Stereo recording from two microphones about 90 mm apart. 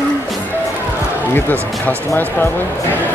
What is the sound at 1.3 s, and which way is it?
Speech, 20° left (ahead or behind).